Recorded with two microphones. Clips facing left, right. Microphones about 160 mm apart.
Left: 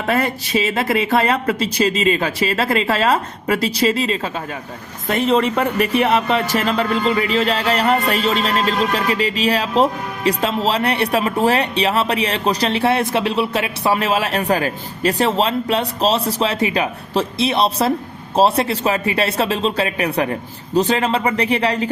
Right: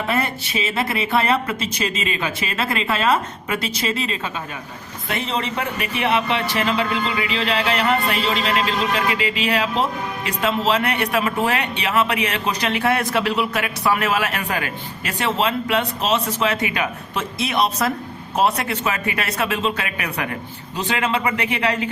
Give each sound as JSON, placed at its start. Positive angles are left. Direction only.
{"t": 1.1, "sound": "speech", "side_deg": 40}